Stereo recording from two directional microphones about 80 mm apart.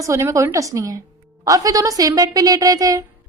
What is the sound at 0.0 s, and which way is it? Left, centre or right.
A woman's voice, right.